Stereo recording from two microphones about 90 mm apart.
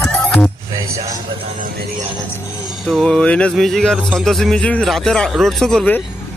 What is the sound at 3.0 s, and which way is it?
Music, 10° left (ahead or behind).